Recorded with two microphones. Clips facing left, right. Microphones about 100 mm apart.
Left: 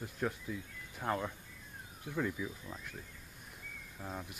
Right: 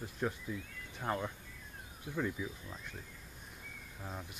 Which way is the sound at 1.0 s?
Centre (ahead or behind).